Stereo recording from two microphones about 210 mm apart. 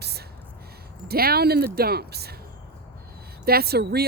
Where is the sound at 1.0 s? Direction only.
45° right (ahead or behind).